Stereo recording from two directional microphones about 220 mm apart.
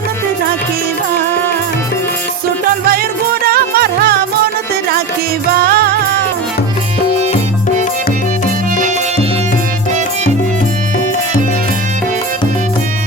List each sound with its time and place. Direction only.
3.4 s music: 45° right (ahead or behind)
5.6 s music: 45° right (ahead or behind)